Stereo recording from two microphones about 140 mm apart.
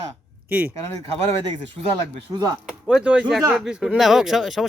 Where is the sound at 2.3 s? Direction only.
25° right (ahead or behind).